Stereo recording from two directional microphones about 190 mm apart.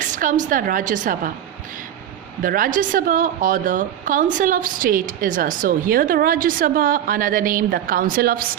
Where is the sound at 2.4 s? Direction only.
45° right (ahead or behind).